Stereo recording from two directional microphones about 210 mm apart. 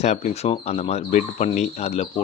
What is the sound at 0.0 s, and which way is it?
A man's voice, 30° left (ahead or behind).